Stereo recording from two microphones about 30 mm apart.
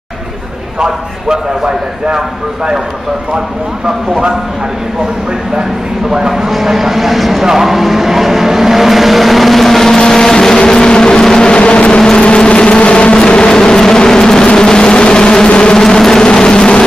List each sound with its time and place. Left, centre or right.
0.7 s a man's voice: right
4.1 s speech: right
6.1 s speech: centre
9.9 s vehicle: centre
11.6 s vehicle: left
13.4 s vehicle: left
15.4 s a sound: left
15.7 s a sound: left
16.1 s vehicle: left